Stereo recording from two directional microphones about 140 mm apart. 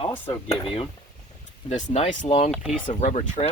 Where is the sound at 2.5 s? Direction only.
5° right (ahead or behind).